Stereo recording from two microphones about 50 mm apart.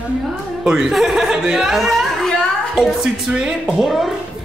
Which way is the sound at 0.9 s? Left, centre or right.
Centre.